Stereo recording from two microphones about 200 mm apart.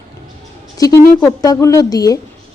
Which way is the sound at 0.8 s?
20° left (ahead or behind).